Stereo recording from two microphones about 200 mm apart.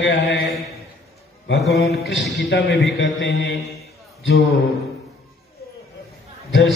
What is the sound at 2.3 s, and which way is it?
A man's voice, 60° left (ahead or behind).